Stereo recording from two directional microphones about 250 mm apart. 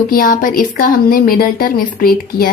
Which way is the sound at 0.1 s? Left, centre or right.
Left.